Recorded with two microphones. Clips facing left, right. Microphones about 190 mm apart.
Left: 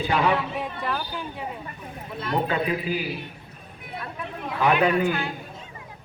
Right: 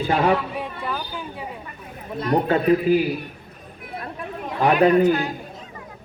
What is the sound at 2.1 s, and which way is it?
Speech, 40° right (ahead or behind).